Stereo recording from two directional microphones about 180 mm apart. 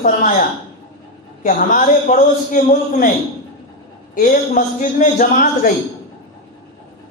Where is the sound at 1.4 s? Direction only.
45° left (ahead or behind).